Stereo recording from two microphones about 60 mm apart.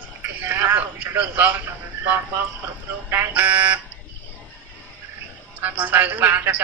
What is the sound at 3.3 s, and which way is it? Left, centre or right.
Speech, right.